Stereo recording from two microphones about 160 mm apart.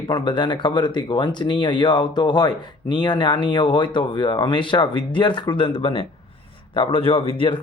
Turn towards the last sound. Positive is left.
turn(degrees=35)  # may be behind; listen again after turning